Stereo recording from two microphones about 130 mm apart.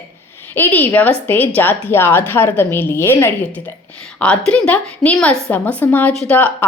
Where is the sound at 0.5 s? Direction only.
15° left (ahead or behind).